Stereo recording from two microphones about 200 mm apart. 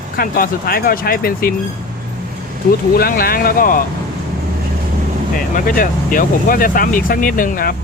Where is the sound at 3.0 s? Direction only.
45° left (ahead or behind).